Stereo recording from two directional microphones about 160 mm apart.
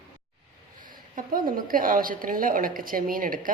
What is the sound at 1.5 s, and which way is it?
A woman's voice, 60° right (ahead or behind).